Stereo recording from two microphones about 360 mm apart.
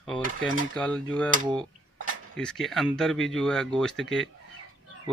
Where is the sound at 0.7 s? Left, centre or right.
Centre.